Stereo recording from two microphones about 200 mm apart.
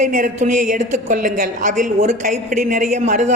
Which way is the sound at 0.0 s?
40° right (ahead or behind).